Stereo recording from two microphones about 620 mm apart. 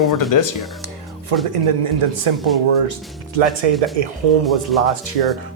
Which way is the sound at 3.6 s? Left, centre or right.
Right.